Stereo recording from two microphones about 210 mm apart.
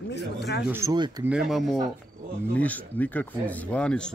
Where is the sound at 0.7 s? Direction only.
15° right (ahead or behind).